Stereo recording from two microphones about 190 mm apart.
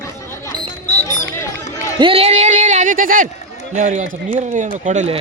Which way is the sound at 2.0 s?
30° right (ahead or behind).